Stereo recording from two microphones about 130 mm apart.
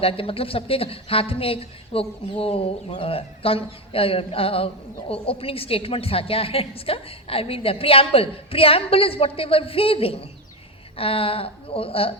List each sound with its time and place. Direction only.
0.0 s a woman's voice: 45° left (ahead or behind)